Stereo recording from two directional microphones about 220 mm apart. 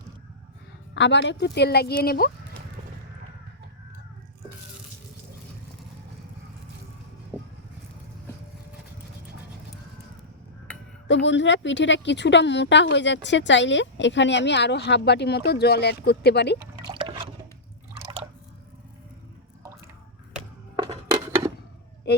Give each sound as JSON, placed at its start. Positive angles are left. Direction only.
{"t": 0.9, "sound": "speech", "side_deg": 55}
{"t": 11.1, "sound": "speech", "side_deg": 55}
{"t": 16.8, "sound": "drip", "side_deg": -25}
{"t": 20.7, "sound": "a sound", "side_deg": -20}